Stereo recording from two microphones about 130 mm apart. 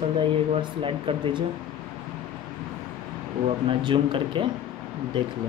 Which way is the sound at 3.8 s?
40° right (ahead or behind).